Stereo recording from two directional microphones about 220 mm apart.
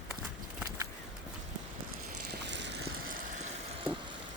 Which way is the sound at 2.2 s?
55° right (ahead or behind).